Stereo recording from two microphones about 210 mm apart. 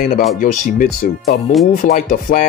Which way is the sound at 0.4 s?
40° left (ahead or behind).